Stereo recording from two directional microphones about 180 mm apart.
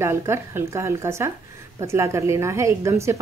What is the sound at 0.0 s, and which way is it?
A woman's voice, 15° right (ahead or behind).